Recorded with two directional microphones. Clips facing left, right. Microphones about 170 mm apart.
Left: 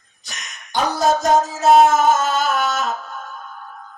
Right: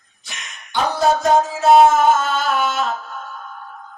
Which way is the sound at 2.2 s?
40° left (ahead or behind).